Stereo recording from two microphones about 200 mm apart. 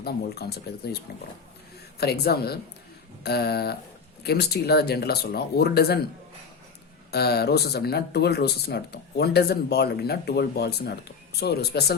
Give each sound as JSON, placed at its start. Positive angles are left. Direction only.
{"t": 0.0, "sound": "speech", "side_deg": 55}
{"t": 2.0, "sound": "speech", "side_deg": 55}
{"t": 7.1, "sound": "speech", "side_deg": 55}